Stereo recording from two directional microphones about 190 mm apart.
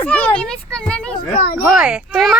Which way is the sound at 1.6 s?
5° right (ahead or behind).